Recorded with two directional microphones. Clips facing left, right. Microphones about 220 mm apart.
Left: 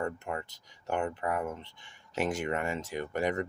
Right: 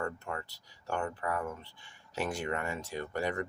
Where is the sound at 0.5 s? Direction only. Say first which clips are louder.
Left 3 dB; 20° left (ahead or behind).